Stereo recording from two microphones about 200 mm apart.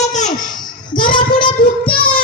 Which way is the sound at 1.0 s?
25° left (ahead or behind).